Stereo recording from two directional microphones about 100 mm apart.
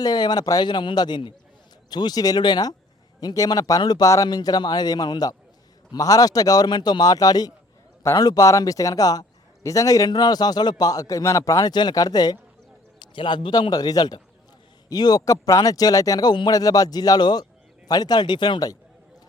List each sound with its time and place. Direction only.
0.0 s speech: 45° left (ahead or behind)
11.7 s speech: 45° left (ahead or behind)